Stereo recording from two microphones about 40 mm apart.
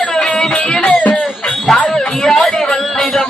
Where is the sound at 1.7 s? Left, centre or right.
Centre.